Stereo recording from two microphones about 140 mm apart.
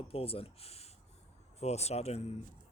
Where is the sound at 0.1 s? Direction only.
45° left (ahead or behind).